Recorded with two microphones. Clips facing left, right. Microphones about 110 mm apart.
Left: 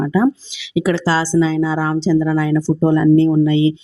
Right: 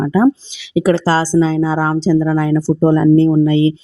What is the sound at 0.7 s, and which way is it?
A woman's voice, 45° right (ahead or behind).